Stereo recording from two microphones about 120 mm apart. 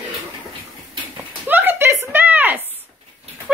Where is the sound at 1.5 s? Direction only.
15° right (ahead or behind).